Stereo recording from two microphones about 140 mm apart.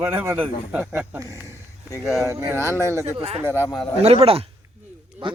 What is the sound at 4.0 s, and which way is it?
Speech, 45° right (ahead or behind).